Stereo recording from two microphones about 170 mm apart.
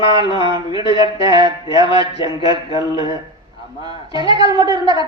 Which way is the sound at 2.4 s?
35° left (ahead or behind).